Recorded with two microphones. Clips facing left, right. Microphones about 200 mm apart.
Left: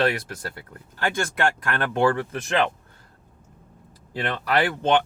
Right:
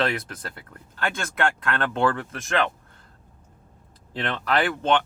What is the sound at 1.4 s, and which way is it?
Speech, 15° left (ahead or behind).